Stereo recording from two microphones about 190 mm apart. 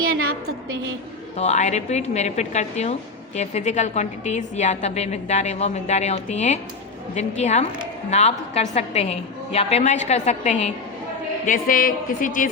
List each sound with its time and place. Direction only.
0.0 s a sound: 90° right
1.4 s a woman's voice: 35° left (ahead or behind)
11.4 s a woman's voice: 45° left (ahead or behind)